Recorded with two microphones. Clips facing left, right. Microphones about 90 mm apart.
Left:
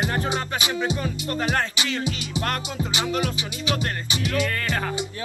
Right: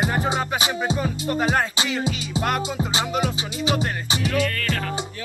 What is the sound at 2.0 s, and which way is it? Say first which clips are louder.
Music: right 3 dB; 25° right (ahead or behind).